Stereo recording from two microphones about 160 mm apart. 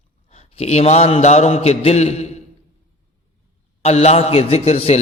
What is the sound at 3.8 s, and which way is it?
A man's voice, 40° left (ahead or behind).